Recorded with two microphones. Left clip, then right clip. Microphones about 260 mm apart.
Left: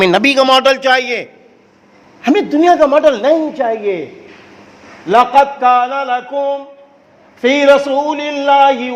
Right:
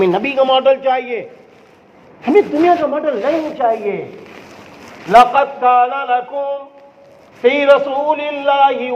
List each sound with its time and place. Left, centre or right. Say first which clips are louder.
0.0 s a man's voice: left 4 dB; left
2.2 s a man's voice: left 1 dB; left
3.6 s mantra: right 1 dB; left
5.0 s mantra: even; left